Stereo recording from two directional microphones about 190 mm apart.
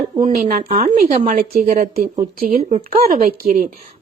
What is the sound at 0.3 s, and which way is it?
Speech, 45° right (ahead or behind).